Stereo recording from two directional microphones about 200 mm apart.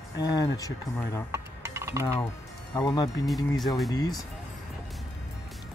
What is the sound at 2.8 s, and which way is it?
Speech, 20° left (ahead or behind).